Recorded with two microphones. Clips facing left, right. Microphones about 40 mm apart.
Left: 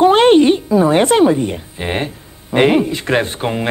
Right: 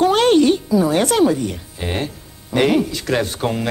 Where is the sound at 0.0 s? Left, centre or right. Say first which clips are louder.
Left 4 dB; left.